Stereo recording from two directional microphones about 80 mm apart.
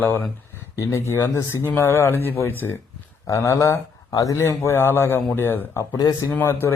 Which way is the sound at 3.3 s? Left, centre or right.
Left.